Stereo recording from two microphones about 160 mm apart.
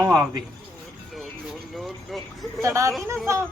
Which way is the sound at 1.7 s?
Centre (ahead or behind).